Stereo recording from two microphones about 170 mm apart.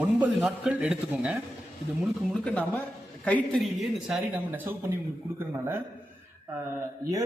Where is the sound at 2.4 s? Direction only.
10° left (ahead or behind); by 5.8 s 15° right (ahead or behind).